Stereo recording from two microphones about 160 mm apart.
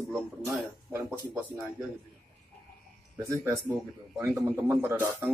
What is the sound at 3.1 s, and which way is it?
Speech, 20° right (ahead or behind).